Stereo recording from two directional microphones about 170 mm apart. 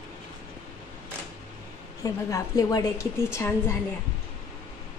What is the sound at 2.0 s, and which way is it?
A woman's voice, 20° left (ahead or behind).